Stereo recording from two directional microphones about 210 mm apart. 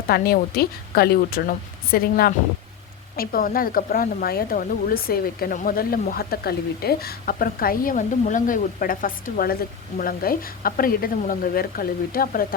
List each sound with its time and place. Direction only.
0.1 s speech: 45° left (ahead or behind)